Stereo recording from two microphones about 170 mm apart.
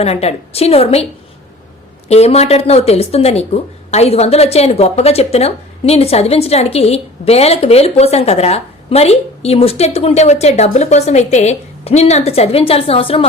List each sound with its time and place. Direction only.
0.0 s speech: 40° left (ahead or behind)
2.0 s speech: 40° left (ahead or behind)